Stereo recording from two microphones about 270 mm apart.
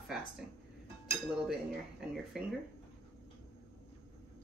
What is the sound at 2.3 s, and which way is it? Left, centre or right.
Speech, centre.